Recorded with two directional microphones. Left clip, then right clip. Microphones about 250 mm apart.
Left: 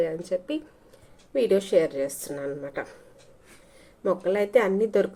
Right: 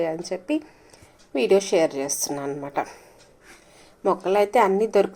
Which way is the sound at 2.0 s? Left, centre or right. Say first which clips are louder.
Right 3 dB; right.